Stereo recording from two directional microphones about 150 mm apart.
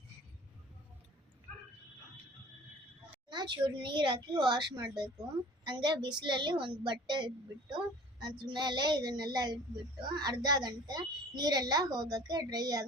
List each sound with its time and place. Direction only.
3.2 s a woman's voice: 30° right (ahead or behind)